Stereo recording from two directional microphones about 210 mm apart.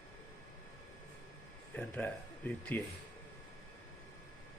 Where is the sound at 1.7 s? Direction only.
5° left (ahead or behind).